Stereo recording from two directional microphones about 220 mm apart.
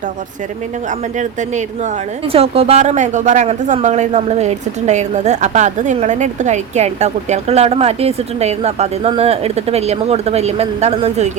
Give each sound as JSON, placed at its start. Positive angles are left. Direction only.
{"t": 0.9, "sound": "speech", "side_deg": -35}